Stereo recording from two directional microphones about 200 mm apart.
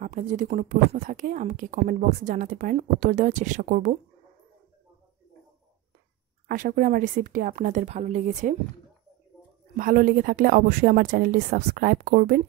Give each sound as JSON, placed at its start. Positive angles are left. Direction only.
{"t": 0.0, "sound": "a woman's voice", "side_deg": -40}
{"t": 6.4, "sound": "a woman's voice", "side_deg": -45}
{"t": 9.8, "sound": "speech", "side_deg": -45}